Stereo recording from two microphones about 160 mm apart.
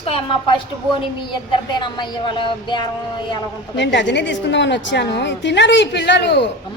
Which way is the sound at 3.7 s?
90° left.